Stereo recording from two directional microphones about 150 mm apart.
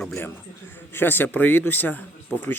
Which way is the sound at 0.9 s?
15° left (ahead or behind).